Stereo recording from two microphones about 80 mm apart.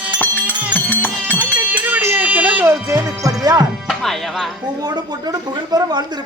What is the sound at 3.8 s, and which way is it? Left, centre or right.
Music, centre.